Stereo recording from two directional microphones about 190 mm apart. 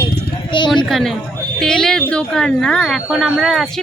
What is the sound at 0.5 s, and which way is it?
Speech, 25° left (ahead or behind).